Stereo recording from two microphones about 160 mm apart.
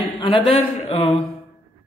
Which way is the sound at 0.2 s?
30° left (ahead or behind).